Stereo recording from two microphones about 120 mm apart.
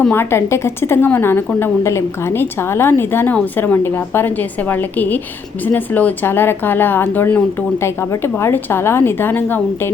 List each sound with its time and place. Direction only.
0.1 s a woman's voice: 20° left (ahead or behind)